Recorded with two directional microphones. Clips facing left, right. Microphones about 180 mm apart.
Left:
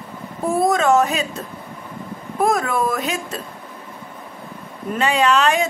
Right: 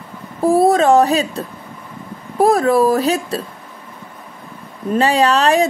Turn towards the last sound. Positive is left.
turn(degrees=-35)  # may be behind; listen again after turning